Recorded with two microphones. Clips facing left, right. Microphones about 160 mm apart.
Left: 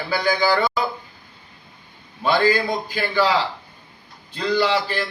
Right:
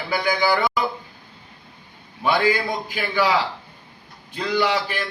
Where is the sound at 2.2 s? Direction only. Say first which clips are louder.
Left 2 dB; 15° right (ahead or behind).